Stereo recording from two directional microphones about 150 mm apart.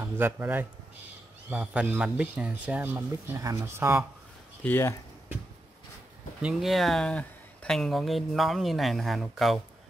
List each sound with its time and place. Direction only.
0.0 s speech: 15° right (ahead or behind)
4.6 s speech: 15° left (ahead or behind)
6.4 s speech: centre (ahead or behind)